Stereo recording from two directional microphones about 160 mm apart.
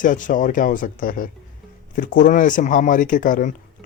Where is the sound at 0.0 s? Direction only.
55° left (ahead or behind).